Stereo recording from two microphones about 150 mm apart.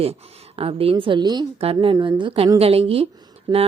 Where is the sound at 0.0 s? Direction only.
40° right (ahead or behind).